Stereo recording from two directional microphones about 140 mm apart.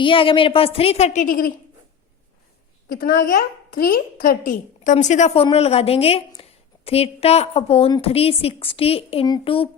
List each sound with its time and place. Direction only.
0.0 s a woman's voice: 40° left (ahead or behind); by 1.5 s 90° left
2.9 s a woman's voice: 90° left; by 9.6 s 40° left (ahead or behind)